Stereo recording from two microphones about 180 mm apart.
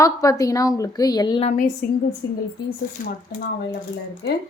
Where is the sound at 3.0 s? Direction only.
55° left (ahead or behind).